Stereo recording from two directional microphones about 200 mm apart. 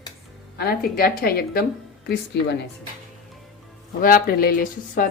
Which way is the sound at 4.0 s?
45° left (ahead or behind).